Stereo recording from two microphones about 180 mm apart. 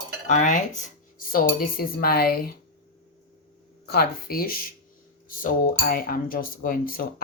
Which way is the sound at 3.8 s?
60° left (ahead or behind).